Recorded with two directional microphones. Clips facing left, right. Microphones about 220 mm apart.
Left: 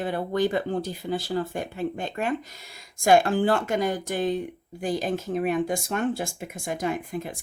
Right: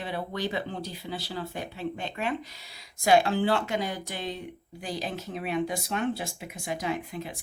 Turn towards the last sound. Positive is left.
turn(degrees=50)  # may be behind; listen again after turning